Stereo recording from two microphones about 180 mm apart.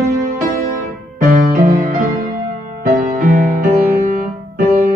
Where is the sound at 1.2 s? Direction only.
50° right (ahead or behind).